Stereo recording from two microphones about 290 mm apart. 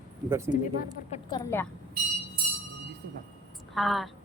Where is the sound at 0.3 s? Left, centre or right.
Centre.